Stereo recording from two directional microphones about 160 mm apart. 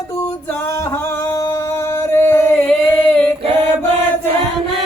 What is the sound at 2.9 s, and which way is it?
Female singing, 10° left (ahead or behind).